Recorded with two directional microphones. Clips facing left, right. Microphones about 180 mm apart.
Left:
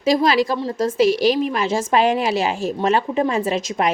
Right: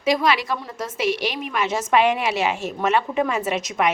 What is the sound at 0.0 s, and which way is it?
A woman's voice, 30° left (ahead or behind).